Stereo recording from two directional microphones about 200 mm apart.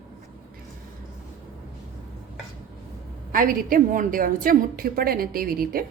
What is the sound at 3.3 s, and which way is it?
A woman's voice, 45° right (ahead or behind).